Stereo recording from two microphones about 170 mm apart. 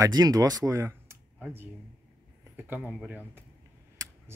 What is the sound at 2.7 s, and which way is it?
Speech, centre (ahead or behind).